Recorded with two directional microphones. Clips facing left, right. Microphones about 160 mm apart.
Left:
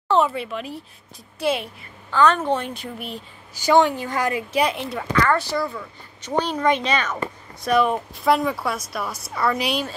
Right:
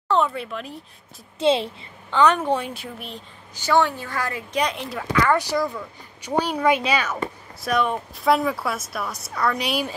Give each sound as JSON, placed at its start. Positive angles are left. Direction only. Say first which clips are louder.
{"t": 0.1, "sound": "speech", "louder": "left 2 dB", "side_deg": 5}
{"t": 1.4, "sound": "a woman's voice", "louder": "right 4 dB", "side_deg": -25}
{"t": 4.5, "sound": "speech", "louder": "left 3 dB", "side_deg": 5}
{"t": 7.6, "sound": "a woman's voice", "louder": "left 3 dB", "side_deg": 0}